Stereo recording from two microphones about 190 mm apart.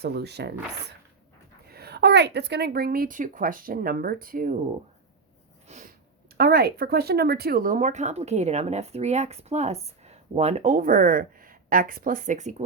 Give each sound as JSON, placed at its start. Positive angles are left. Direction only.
{"t": 0.0, "sound": "speech", "side_deg": -60}
{"t": 1.6, "sound": "a woman's voice", "side_deg": -55}
{"t": 5.6, "sound": "a sound", "side_deg": -40}
{"t": 6.3, "sound": "speech", "side_deg": -55}